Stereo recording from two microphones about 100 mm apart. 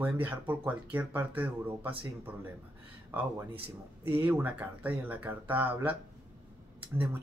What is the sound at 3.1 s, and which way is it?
Speech, 20° right (ahead or behind).